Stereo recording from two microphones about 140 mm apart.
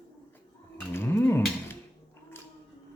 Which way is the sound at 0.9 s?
15° left (ahead or behind).